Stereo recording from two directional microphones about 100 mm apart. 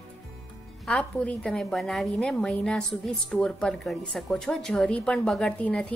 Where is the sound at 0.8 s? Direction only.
10° left (ahead or behind).